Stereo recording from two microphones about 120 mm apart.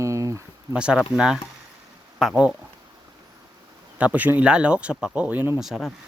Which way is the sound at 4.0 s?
10° right (ahead or behind).